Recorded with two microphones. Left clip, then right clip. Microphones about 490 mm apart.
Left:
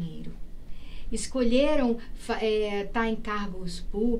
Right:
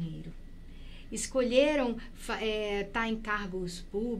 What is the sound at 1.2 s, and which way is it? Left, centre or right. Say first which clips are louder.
A woman's voice: left 1 dB; right.